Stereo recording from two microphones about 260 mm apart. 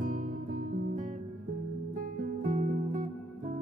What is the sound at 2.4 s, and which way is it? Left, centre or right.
Music, right.